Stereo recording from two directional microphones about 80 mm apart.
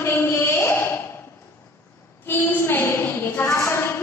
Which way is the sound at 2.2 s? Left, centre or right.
Left.